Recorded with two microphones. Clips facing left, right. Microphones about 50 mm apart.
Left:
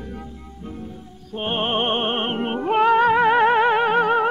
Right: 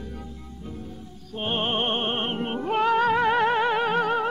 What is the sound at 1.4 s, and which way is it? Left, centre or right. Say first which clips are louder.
Music: left 3 dB; centre.